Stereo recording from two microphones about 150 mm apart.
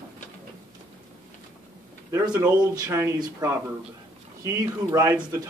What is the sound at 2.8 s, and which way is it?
Speech, 20° right (ahead or behind).